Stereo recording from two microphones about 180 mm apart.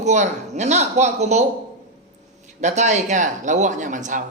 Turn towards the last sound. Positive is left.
turn(degrees=-45)  # may be behind; listen again after turning